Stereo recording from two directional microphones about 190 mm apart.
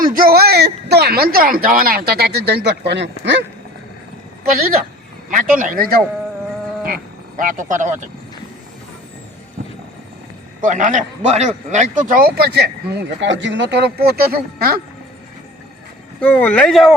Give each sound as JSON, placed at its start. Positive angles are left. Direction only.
{"t": 0.0, "sound": "speech", "side_deg": -50}
{"t": 5.3, "sound": "speech", "side_deg": -45}
{"t": 10.6, "sound": "speech", "side_deg": -40}
{"t": 16.2, "sound": "speech", "side_deg": 10}